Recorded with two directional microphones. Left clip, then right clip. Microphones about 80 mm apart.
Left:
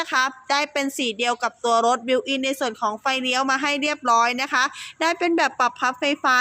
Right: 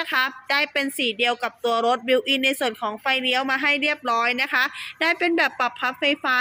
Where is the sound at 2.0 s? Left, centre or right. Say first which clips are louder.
Right 2 dB; centre.